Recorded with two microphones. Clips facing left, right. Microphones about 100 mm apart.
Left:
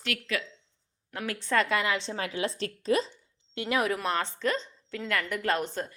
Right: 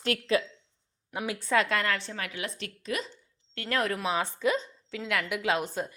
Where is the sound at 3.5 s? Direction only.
15° left (ahead or behind); by 5.9 s 5° right (ahead or behind).